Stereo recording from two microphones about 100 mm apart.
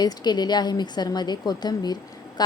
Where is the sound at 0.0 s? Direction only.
45° left (ahead or behind).